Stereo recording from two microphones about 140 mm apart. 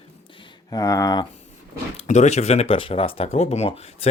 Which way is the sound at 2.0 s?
55° left (ahead or behind).